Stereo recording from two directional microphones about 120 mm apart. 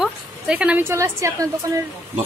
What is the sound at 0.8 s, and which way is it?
Speech, 25° right (ahead or behind).